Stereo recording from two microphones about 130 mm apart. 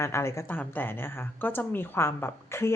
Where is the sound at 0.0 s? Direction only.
20° left (ahead or behind).